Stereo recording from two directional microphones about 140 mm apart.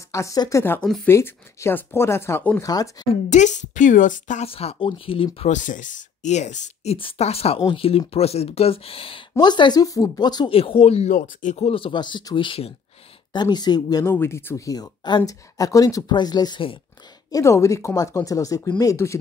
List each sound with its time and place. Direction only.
0.1 s speech: 25° left (ahead or behind)
2.6 s speech: 25° left (ahead or behind)
3.1 s a woman's voice: 60° left (ahead or behind)
4.5 s speech: 45° left (ahead or behind)
5.5 s speech: 65° left (ahead or behind); by 9.2 s 40° left (ahead or behind)
9.4 s speech: 30° left (ahead or behind); by 11.1 s 45° left (ahead or behind)
11.1 s speech: 75° left (ahead or behind)
11.5 s speech: 45° left (ahead or behind)
14.0 s speech: 15° left (ahead or behind); by 16.8 s 35° left (ahead or behind)
17.3 s speech: 20° left (ahead or behind)